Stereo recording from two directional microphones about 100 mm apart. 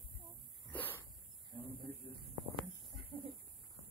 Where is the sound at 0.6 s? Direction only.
15° left (ahead or behind).